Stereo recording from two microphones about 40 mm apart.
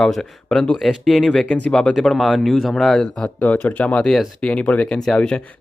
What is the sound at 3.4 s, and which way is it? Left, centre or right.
Speech, left.